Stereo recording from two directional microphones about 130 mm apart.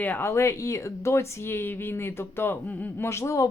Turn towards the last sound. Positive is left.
turn(degrees=25)  # may be behind; listen again after turning